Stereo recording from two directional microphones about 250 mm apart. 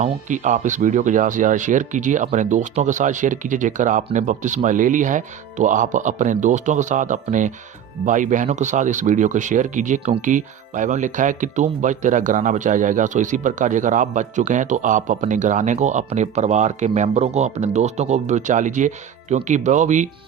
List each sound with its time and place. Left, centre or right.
0.0 s speech: right